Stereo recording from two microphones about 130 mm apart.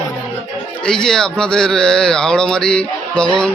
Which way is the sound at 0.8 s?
5° left (ahead or behind).